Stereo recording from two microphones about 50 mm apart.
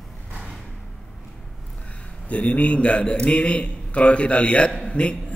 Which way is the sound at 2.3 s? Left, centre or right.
Left.